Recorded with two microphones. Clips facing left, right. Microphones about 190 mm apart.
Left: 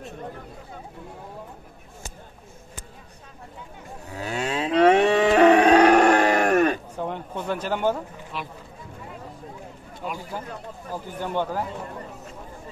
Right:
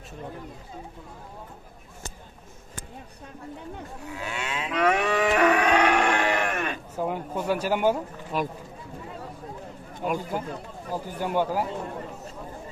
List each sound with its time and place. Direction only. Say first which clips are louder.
4.1 s livestock: left 6 dB; 40° left (ahead or behind)
7.0 s a sound: right 2 dB; 5° right (ahead or behind)
8.3 s speech: right 7 dB; 45° right (ahead or behind)
10.9 s speech: right 1 dB; 10° right (ahead or behind)